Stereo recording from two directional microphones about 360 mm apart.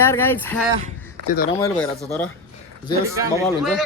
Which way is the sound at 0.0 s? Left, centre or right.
Centre.